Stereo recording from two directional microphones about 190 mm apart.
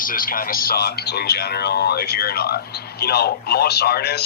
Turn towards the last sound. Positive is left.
turn(degrees=60)  # may be behind; listen again after turning